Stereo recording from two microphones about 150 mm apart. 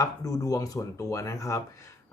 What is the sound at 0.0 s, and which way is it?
A man's voice, 25° left (ahead or behind).